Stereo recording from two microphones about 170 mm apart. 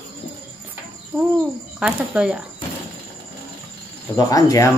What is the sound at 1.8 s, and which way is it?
Speech, 5° right (ahead or behind).